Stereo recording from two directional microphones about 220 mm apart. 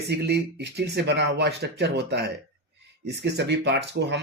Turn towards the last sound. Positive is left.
turn(degrees=-50)  # may be behind; listen again after turning